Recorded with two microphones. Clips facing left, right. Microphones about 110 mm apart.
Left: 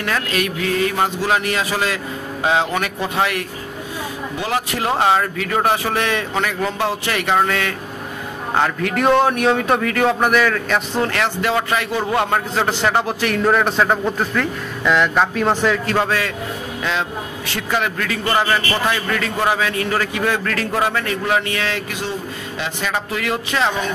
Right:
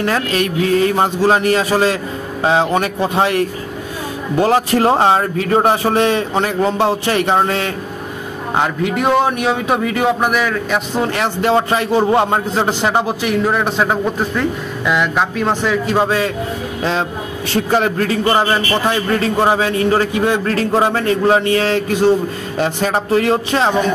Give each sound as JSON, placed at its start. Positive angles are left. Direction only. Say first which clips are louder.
{"t": 0.0, "sound": "a man's voice", "louder": "right 4 dB", "side_deg": -35}
{"t": 8.5, "sound": "a man's voice", "louder": "right 2 dB", "side_deg": -15}
{"t": 11.1, "sound": "a man's voice", "louder": "right 4 dB", "side_deg": -25}
{"t": 15.9, "sound": "a man's voice", "louder": "right 4 dB", "side_deg": -20}
{"t": 17.5, "sound": "a man's voice", "louder": "right 7 dB", "side_deg": -35}